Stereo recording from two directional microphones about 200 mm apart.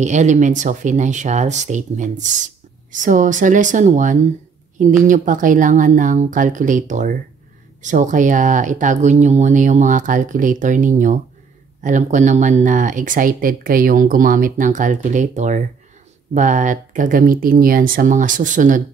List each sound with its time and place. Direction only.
0.0 s speech: 35° right (ahead or behind)